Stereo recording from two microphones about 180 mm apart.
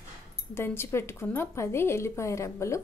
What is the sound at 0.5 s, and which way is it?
A woman's voice, 15° left (ahead or behind).